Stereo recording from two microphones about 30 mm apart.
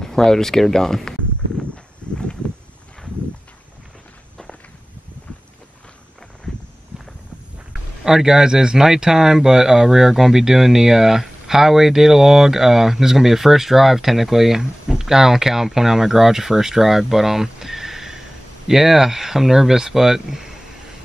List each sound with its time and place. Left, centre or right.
0.0 s speech: centre
2.0 s horse: left
7.7 s speech: centre